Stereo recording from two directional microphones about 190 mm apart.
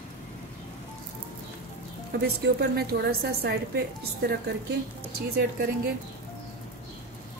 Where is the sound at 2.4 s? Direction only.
55° right (ahead or behind).